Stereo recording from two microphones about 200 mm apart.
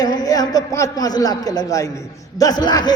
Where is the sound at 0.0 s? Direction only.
20° left (ahead or behind).